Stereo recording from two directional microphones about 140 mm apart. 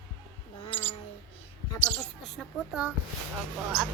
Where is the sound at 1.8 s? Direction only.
20° right (ahead or behind).